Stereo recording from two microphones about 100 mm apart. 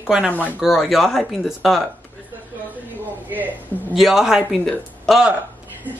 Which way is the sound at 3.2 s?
15° right (ahead or behind).